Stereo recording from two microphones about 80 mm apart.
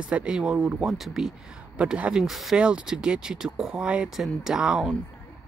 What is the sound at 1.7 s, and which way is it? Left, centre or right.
Speech, centre.